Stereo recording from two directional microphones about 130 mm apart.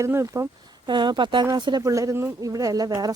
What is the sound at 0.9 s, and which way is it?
Speech, 35° right (ahead or behind).